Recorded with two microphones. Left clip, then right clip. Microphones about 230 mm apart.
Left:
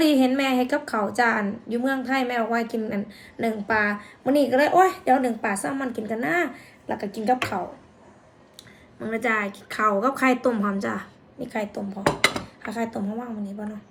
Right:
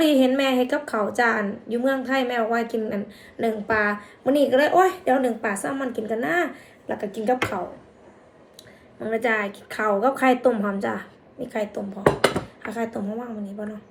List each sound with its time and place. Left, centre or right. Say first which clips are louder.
0.0 s a woman's voice: right 2 dB; centre
9.0 s a woman's voice: right 2 dB; left